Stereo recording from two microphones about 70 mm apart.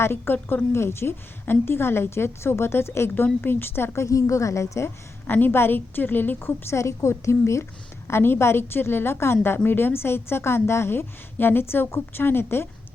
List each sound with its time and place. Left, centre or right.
0.0 s a woman's voice: left
5.2 s a woman's voice: left